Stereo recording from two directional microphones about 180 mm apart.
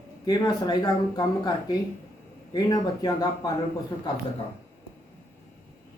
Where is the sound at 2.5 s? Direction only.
20° left (ahead or behind).